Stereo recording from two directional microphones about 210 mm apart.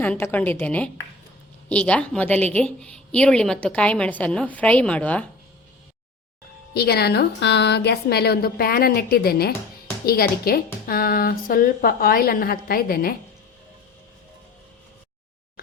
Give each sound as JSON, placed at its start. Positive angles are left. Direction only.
{"t": 0.0, "sound": "a woman's voice", "side_deg": 10}
{"t": 6.7, "sound": "speech", "side_deg": 50}